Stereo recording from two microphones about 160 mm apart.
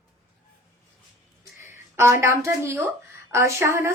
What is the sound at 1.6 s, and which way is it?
Speech, 15° right (ahead or behind).